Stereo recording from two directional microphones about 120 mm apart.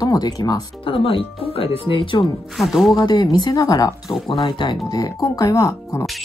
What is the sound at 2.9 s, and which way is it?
Speech, 35° left (ahead or behind).